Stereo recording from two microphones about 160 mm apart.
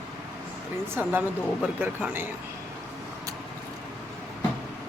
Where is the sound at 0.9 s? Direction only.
10° right (ahead or behind).